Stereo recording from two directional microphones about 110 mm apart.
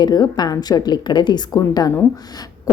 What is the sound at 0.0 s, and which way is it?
A woman's voice, 40° left (ahead or behind).